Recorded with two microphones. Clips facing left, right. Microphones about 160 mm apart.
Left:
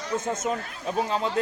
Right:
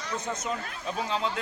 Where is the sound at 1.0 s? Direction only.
45° left (ahead or behind).